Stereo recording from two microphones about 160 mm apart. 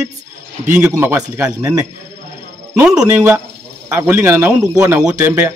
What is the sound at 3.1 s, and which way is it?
Speech, 20° right (ahead or behind).